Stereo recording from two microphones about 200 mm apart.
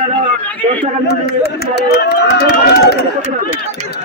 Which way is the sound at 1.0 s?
55° left (ahead or behind).